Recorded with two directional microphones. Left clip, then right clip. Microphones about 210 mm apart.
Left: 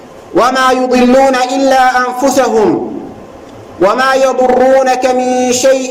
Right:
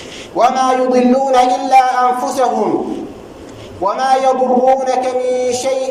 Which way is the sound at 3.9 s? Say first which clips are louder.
Left 1 dB; 45° left (ahead or behind).